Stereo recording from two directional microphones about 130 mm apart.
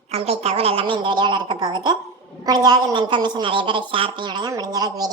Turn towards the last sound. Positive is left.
turn(degrees=-30)  # may be behind; listen again after turning